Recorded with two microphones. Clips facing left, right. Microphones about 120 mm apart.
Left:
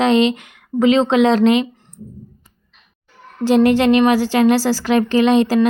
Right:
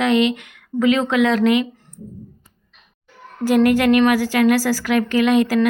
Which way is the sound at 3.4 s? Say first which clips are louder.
Left 2 dB; 25° left (ahead or behind).